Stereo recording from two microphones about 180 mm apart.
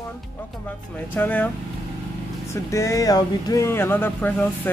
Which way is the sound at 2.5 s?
15° left (ahead or behind).